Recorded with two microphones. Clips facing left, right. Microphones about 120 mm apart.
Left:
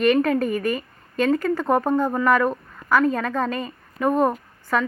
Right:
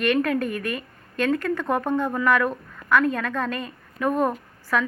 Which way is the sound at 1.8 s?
35° left (ahead or behind).